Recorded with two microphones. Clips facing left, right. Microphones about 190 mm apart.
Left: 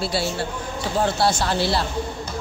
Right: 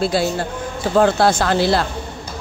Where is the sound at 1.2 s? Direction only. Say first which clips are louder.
Right 5 dB; 55° right (ahead or behind).